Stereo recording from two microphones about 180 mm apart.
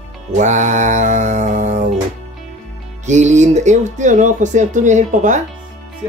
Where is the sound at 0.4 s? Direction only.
40° right (ahead or behind).